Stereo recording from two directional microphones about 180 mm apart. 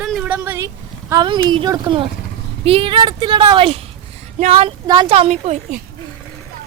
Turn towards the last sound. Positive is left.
turn(degrees=-40)  # may be behind; listen again after turning